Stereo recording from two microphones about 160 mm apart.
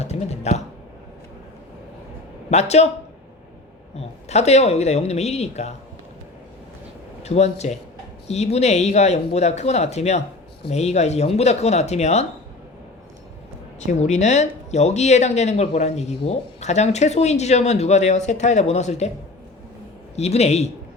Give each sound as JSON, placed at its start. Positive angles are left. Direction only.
{"t": 0.0, "sound": "typing", "side_deg": 40}
{"t": 2.5, "sound": "speech", "side_deg": 45}
{"t": 3.9, "sound": "speech", "side_deg": 45}
{"t": 7.2, "sound": "speech", "side_deg": 45}
{"t": 13.7, "sound": "speech", "side_deg": 45}
{"t": 20.1, "sound": "speech", "side_deg": 40}